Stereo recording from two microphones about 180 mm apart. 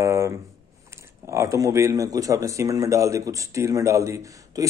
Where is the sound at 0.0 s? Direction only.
15° right (ahead or behind).